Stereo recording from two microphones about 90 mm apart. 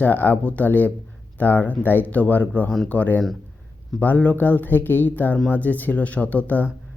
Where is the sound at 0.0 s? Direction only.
20° left (ahead or behind).